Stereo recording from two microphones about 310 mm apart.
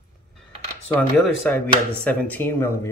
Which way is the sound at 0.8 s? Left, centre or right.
Centre.